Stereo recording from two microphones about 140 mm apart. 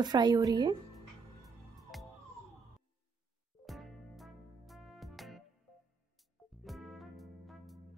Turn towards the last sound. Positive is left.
turn(degrees=0)  # may be behind; listen again after turning